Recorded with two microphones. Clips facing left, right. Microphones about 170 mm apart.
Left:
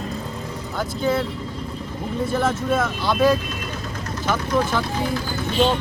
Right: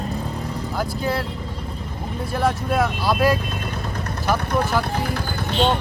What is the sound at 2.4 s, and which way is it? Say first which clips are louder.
Speech: right 2 dB; centre (ahead or behind).